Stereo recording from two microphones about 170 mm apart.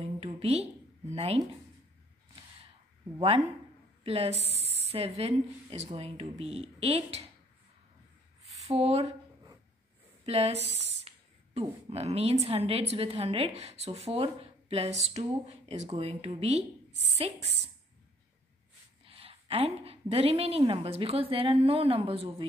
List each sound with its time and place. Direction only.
0.2 s a woman's voice: 35° right (ahead or behind)
3.2 s a woman's voice: 35° right (ahead or behind)
8.6 s a woman's voice: 40° right (ahead or behind)
10.2 s a sound: 35° right (ahead or behind)
11.9 s a woman's voice: 40° right (ahead or behind)
19.0 s a woman's voice: 35° right (ahead or behind)